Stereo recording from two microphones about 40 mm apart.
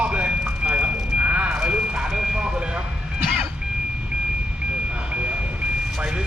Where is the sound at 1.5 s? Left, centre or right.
Right.